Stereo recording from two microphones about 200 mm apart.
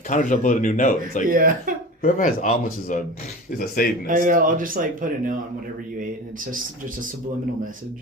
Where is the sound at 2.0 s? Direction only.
45° left (ahead or behind).